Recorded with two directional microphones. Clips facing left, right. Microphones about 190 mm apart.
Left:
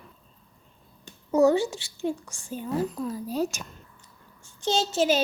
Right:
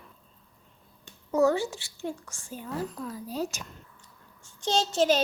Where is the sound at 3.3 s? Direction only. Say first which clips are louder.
Left 3 dB; 50° left (ahead or behind).